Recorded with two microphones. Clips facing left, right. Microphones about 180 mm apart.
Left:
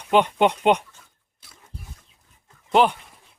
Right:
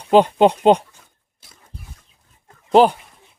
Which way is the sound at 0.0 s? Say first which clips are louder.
Right 5 dB; 35° right (ahead or behind).